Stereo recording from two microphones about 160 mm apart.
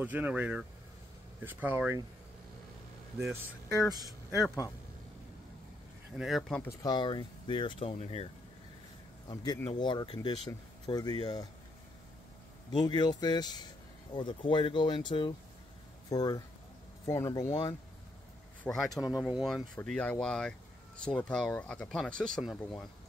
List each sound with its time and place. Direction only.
0.0 s speech: 10° right (ahead or behind)
6.1 s speech: centre (ahead or behind)
6.8 s speech: 30° left (ahead or behind)
9.3 s speech: 25° left (ahead or behind)
12.7 s speech: 25° left (ahead or behind)
18.6 s speech: 5° left (ahead or behind)